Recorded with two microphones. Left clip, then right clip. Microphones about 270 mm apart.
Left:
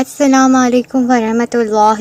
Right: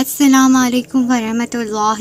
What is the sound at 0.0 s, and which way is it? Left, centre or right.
A woman's voice, left.